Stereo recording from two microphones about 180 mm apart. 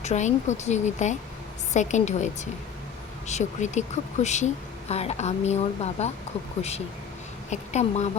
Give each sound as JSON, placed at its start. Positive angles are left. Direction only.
{"t": 0.0, "sound": "a woman's voice", "side_deg": 40}